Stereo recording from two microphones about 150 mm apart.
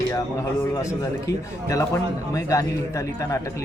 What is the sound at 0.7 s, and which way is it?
Speech, 20° left (ahead or behind).